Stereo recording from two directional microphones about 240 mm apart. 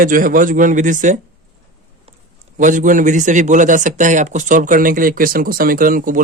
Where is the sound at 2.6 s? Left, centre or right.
Right.